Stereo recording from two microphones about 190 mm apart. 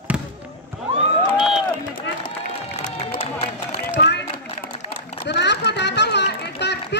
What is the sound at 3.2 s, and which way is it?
Run, 35° left (ahead or behind).